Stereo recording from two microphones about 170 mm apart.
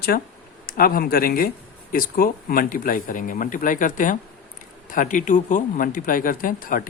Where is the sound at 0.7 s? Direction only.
60° left (ahead or behind).